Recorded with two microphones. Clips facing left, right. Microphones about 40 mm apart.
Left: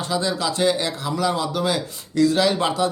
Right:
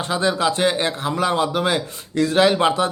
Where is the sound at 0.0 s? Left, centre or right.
Right.